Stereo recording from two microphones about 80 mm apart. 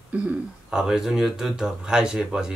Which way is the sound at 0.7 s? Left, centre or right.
Centre.